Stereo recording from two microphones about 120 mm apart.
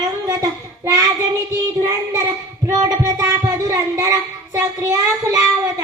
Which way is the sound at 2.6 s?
25° right (ahead or behind).